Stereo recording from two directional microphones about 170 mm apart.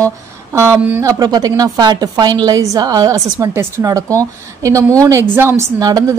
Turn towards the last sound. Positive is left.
turn(degrees=-20)  # may be behind; listen again after turning